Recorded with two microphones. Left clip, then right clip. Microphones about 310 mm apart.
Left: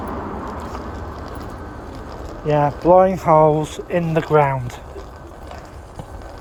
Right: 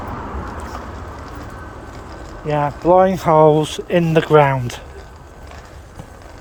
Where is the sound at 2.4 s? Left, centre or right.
Centre.